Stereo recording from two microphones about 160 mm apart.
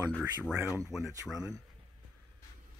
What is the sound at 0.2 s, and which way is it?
Speech, 10° right (ahead or behind).